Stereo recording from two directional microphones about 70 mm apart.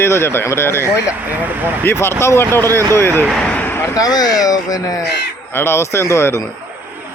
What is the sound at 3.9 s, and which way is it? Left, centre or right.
Speech, left.